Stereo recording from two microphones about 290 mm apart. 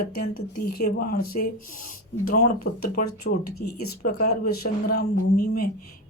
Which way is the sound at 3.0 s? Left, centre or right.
Left.